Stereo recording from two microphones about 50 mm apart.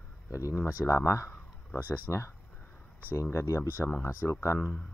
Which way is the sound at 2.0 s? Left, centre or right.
Left.